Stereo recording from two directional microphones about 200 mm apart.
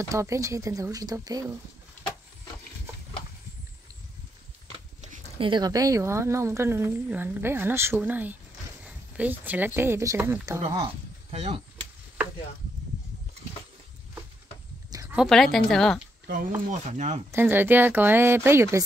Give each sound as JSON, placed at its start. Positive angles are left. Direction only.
{"t": 0.1, "sound": "a woman's voice", "side_deg": -15}
{"t": 4.7, "sound": "a sound", "side_deg": -30}
{"t": 5.5, "sound": "a woman's voice", "side_deg": -20}
{"t": 8.8, "sound": "a sound", "side_deg": -5}
{"t": 9.8, "sound": "a woman's voice", "side_deg": -10}
{"t": 10.6, "sound": "speech", "side_deg": -30}
{"t": 14.9, "sound": "a sound", "side_deg": -15}
{"t": 15.1, "sound": "speech", "side_deg": 0}
{"t": 16.9, "sound": "speech", "side_deg": -35}
{"t": 17.3, "sound": "a woman's voice", "side_deg": -10}